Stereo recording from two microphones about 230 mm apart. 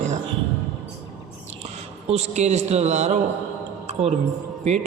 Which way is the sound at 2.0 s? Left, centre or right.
Right.